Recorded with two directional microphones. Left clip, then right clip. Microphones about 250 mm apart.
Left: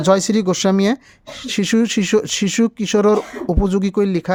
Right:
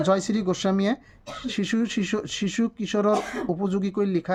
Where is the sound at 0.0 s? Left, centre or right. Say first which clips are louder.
Left 8 dB; left.